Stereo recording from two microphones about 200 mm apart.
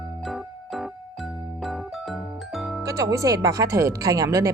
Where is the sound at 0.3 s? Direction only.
Centre (ahead or behind).